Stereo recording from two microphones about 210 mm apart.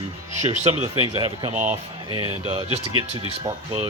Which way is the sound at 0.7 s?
30° right (ahead or behind).